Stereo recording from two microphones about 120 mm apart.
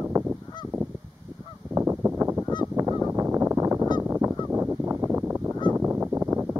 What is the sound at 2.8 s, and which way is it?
Honk, 25° right (ahead or behind).